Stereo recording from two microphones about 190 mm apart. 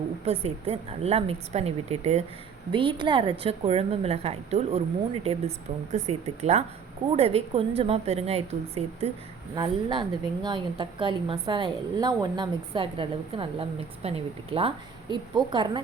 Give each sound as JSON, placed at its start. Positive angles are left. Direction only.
{"t": 0.3, "sound": "a woman's voice", "side_deg": -30}